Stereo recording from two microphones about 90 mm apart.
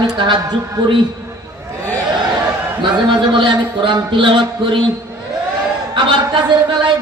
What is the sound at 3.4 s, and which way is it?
Speech, 65° right (ahead or behind).